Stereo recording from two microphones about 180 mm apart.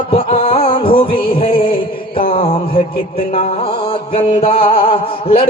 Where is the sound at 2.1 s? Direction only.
30° left (ahead or behind).